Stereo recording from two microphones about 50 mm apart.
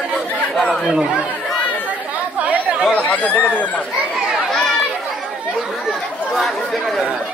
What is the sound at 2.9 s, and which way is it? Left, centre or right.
Chatter, left.